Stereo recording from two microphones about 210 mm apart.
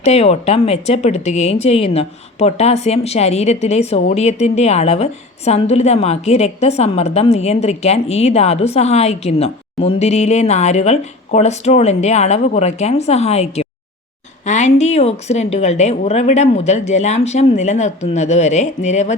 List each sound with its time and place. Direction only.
0.0 s a woman's voice: 30° left (ahead or behind)